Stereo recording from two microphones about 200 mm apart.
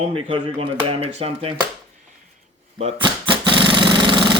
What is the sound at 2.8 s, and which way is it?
Engine, 25° right (ahead or behind).